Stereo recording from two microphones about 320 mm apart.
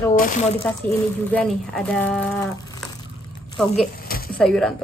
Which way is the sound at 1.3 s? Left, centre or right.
Centre.